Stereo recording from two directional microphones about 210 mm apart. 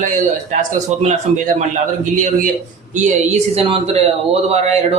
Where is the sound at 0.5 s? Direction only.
35° right (ahead or behind).